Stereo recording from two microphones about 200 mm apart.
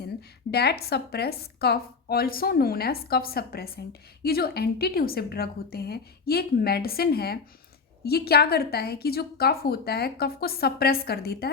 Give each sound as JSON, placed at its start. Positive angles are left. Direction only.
{"t": 0.5, "sound": "a woman's voice", "side_deg": 55}